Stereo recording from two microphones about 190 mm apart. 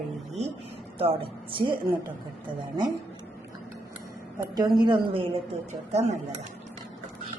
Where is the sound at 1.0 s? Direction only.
30° right (ahead or behind).